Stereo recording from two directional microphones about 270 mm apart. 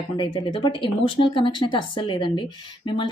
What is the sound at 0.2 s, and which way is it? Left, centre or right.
Speech, centre.